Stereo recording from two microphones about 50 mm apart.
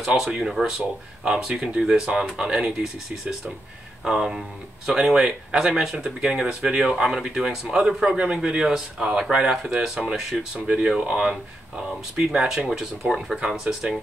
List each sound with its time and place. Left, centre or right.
0.0 s speech: centre